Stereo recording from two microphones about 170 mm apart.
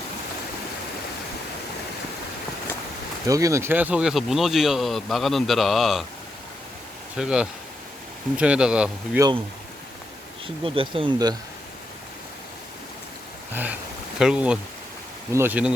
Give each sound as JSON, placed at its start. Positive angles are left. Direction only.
{"t": 3.2, "sound": "speech", "side_deg": -20}
{"t": 7.2, "sound": "speech", "side_deg": -5}
{"t": 10.4, "sound": "speech", "side_deg": -30}
{"t": 13.5, "sound": "speech", "side_deg": -10}